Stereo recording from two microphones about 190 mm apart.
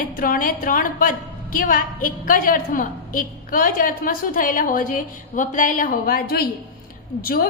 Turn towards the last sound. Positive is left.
turn(degrees=50)  # may be behind; listen again after turning